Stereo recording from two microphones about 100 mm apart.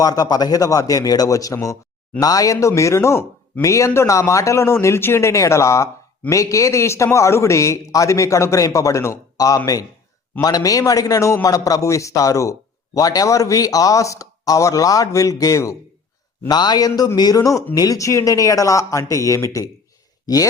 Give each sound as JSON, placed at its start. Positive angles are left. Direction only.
{"t": 0.0, "sound": "a man's voice", "side_deg": 40}
{"t": 16.5, "sound": "a man's voice", "side_deg": 45}